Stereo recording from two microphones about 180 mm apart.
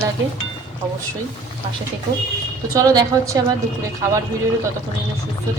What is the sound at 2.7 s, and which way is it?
Speech, 20° right (ahead or behind).